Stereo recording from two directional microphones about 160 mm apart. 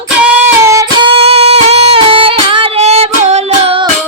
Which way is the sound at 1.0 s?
40° right (ahead or behind).